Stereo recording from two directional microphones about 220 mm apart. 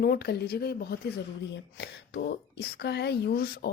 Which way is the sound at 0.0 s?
45° left (ahead or behind).